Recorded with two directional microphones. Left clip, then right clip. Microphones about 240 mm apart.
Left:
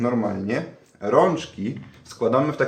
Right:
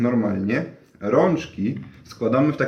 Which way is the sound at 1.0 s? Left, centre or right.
Left.